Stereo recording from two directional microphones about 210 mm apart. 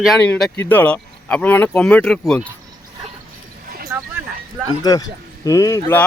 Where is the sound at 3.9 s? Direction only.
10° right (ahead or behind).